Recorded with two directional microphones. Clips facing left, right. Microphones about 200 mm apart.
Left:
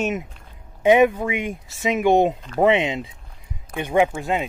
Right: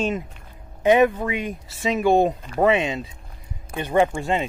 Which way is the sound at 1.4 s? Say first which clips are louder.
Left 1 dB; 20° left (ahead or behind).